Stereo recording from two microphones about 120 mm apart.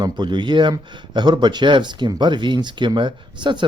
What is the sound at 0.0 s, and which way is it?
Speech, 40° right (ahead or behind).